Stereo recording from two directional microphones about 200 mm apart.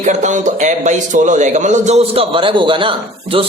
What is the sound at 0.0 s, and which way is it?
Speech, 35° right (ahead or behind).